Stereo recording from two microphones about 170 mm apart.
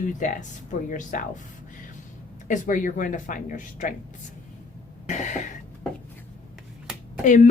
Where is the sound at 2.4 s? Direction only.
50° left (ahead or behind).